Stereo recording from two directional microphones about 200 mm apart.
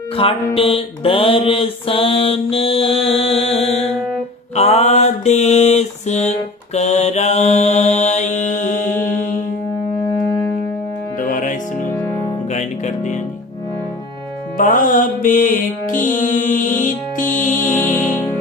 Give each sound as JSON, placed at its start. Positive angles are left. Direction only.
{"t": 0.2, "sound": "mantra", "side_deg": 25}
{"t": 11.2, "sound": "music", "side_deg": 40}
{"t": 14.6, "sound": "music", "side_deg": 40}